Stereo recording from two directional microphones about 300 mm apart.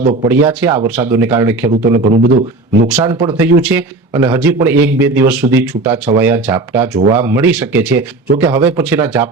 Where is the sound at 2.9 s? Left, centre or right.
Centre.